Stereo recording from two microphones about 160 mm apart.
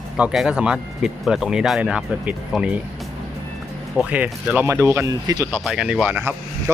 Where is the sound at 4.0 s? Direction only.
10° right (ahead or behind).